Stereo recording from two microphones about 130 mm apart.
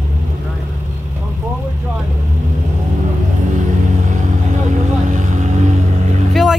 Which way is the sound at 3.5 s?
75° right (ahead or behind).